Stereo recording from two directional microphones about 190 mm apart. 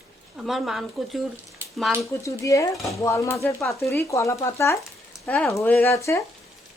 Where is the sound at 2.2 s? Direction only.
15° left (ahead or behind).